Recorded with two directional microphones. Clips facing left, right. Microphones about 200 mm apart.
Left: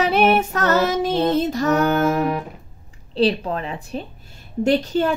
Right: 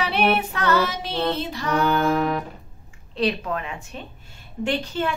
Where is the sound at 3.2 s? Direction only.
30° left (ahead or behind).